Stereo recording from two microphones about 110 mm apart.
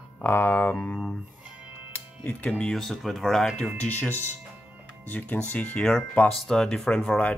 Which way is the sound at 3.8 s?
15° left (ahead or behind).